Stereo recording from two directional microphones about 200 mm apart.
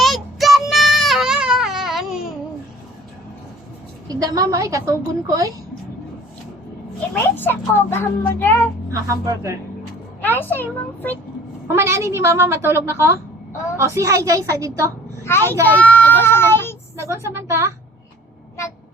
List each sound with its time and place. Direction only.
0.0 s baby cry: centre (ahead or behind)
4.1 s a woman's voice: 20° right (ahead or behind)
7.1 s a child's voice: 10° left (ahead or behind)
8.9 s a woman's voice: 15° right (ahead or behind)
10.2 s a child's voice: 10° left (ahead or behind)
11.7 s a woman's voice: 15° right (ahead or behind)
15.2 s a child's voice: 10° left (ahead or behind)
15.6 s child singing: 10° left (ahead or behind)
17.0 s a woman's voice: 15° right (ahead or behind)